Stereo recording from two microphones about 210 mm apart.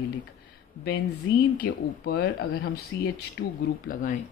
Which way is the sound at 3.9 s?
40° left (ahead or behind).